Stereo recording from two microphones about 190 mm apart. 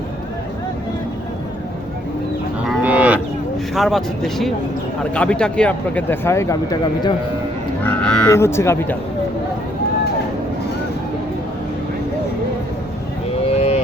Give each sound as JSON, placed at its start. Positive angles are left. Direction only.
{"t": 2.6, "sound": "moo", "side_deg": -5}
{"t": 3.8, "sound": "speech", "side_deg": 0}
{"t": 7.9, "sound": "speech", "side_deg": 5}
{"t": 13.4, "sound": "vehicle", "side_deg": 35}